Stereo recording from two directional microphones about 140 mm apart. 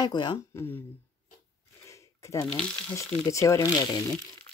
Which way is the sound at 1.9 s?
20° left (ahead or behind).